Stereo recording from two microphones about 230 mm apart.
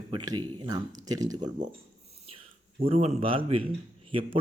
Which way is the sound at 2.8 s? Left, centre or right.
Right.